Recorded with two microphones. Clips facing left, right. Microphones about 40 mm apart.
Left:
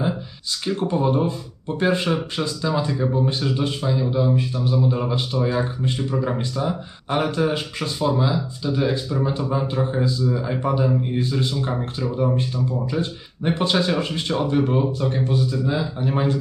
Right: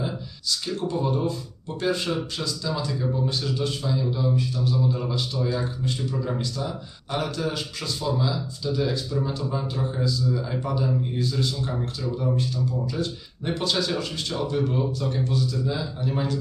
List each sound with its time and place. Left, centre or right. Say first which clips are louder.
0.0 s speech: left 5 dB; left